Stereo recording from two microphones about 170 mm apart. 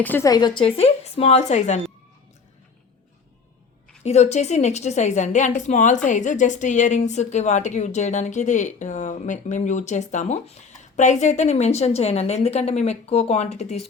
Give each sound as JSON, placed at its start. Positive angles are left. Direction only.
{"t": 0.0, "sound": "a woman's voice", "side_deg": 10}
{"t": 0.3, "sound": "speech", "side_deg": 25}
{"t": 4.0, "sound": "a woman's voice", "side_deg": 40}